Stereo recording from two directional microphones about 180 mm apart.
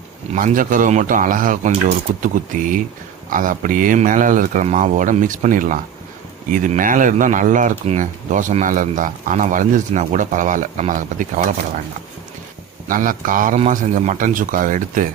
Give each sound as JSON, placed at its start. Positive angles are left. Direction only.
{"t": 0.3, "sound": "speech", "side_deg": -45}
{"t": 12.9, "sound": "speech", "side_deg": -50}